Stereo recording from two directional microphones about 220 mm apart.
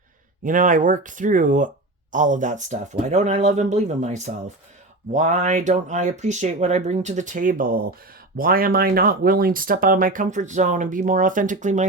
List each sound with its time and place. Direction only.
0.4 s speech: 35° right (ahead or behind)